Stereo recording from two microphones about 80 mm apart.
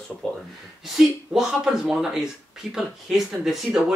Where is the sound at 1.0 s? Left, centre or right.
Centre.